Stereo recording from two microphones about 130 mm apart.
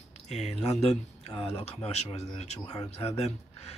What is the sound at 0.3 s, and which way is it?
Speech, 55° left (ahead or behind).